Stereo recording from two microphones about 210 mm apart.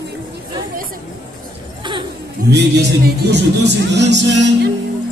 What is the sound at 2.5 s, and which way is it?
A man's voice, 55° right (ahead or behind).